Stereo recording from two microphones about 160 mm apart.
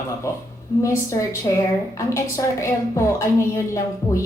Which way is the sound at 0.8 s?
20° left (ahead or behind).